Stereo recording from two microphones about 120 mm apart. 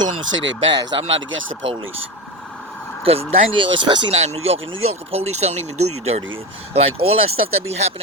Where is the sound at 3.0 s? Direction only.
50° right (ahead or behind).